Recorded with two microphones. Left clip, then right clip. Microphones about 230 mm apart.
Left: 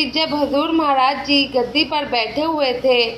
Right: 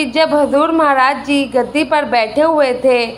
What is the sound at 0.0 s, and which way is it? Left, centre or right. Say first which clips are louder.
A woman's voice: right 6 dB; right.